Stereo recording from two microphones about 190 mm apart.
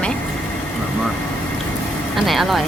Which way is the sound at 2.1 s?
Centre (ahead or behind).